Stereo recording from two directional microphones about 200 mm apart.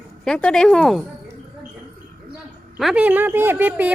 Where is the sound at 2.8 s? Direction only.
5° right (ahead or behind).